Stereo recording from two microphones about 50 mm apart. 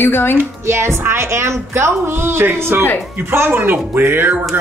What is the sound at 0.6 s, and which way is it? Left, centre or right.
A woman's voice, right.